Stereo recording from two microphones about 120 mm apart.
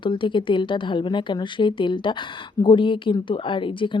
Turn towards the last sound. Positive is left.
turn(degrees=45)  # may be behind; listen again after turning